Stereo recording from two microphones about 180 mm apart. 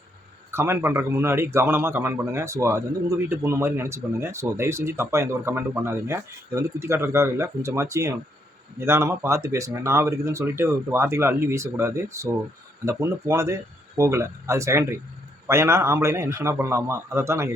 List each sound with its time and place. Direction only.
0.5 s a man's voice: 15° right (ahead or behind)